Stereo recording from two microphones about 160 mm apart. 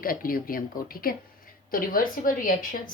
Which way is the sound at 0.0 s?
65° left (ahead or behind).